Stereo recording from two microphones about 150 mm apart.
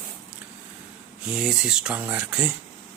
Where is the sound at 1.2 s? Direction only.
5° right (ahead or behind).